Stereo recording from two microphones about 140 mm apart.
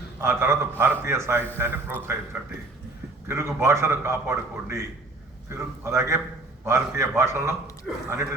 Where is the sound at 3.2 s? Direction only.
20° right (ahead or behind).